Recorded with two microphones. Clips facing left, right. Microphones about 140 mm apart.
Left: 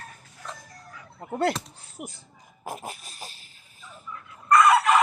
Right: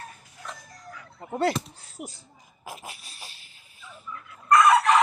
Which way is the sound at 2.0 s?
60° left (ahead or behind).